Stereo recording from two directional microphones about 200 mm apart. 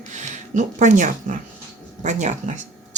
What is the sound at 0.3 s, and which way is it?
Speech, 40° right (ahead or behind).